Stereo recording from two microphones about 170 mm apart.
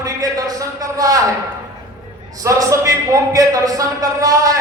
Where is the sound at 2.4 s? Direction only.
20° right (ahead or behind).